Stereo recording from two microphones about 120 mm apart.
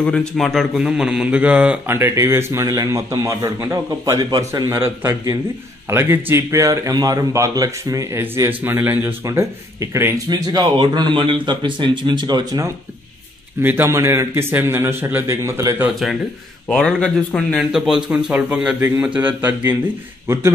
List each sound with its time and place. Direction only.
0.0 s speech: 5° left (ahead or behind); by 2.0 s 10° right (ahead or behind)
2.0 s a man's voice: 20° right (ahead or behind)
8.5 s a man's voice: 15° right (ahead or behind)
10.3 s speech: 35° right (ahead or behind)
13.6 s a man's voice: 15° right (ahead or behind)
15.9 s speech: centre (ahead or behind)
17.6 s a man's voice: 5° right (ahead or behind); by 20.4 s 20° right (ahead or behind)